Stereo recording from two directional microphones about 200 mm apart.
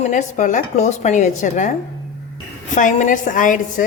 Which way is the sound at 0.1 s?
40° left (ahead or behind).